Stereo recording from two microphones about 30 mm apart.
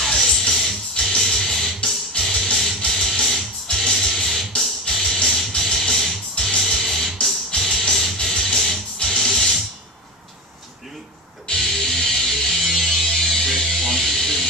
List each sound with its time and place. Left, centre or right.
0.0 s music: centre
6.3 s music: left
6.6 s music: centre
11.4 s music: centre